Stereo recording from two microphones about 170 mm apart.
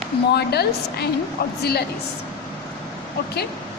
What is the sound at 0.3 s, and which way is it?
Speech, 70° left (ahead or behind).